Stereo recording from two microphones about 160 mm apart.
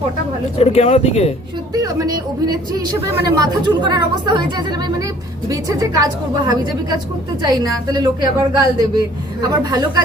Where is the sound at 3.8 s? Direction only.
25° right (ahead or behind).